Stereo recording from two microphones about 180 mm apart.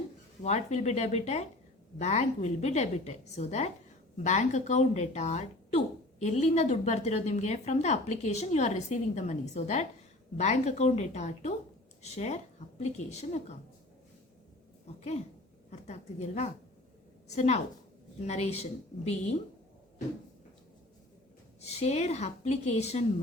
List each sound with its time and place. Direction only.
0.4 s speech: 40° left (ahead or behind)
15.7 s a woman's voice: 40° left (ahead or behind)
21.6 s speech: 35° left (ahead or behind)